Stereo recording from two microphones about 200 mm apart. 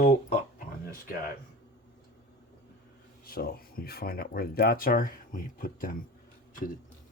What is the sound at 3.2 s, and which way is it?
Speech, 50° left (ahead or behind).